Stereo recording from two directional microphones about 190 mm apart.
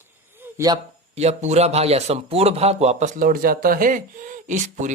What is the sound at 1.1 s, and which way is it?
Speech, 35° right (ahead or behind).